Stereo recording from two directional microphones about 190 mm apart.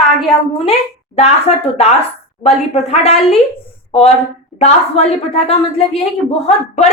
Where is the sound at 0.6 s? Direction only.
30° left (ahead or behind).